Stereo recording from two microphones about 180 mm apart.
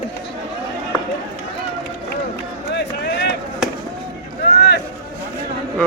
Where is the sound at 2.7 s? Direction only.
70° left (ahead or behind).